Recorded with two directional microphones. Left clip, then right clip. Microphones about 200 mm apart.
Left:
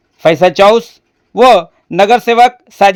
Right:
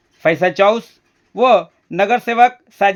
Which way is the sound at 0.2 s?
25° left (ahead or behind).